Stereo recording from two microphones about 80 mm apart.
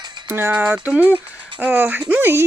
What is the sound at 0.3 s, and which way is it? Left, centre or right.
Speech, right.